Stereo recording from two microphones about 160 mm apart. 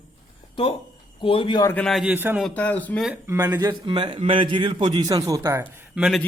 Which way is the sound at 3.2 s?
15° right (ahead or behind).